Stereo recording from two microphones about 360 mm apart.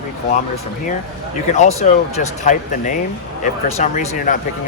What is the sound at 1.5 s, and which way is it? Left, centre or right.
Speech, centre.